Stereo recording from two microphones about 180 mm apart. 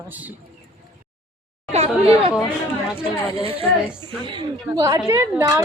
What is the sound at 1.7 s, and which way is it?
Speech, 35° right (ahead or behind).